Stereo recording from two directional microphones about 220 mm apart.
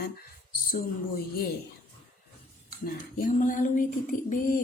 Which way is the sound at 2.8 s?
40° left (ahead or behind).